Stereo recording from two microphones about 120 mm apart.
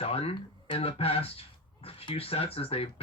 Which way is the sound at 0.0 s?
55° left (ahead or behind).